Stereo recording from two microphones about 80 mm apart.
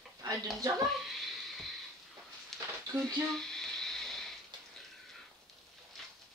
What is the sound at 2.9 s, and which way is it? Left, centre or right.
Speech, right.